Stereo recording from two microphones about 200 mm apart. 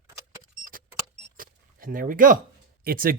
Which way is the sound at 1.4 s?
45° right (ahead or behind).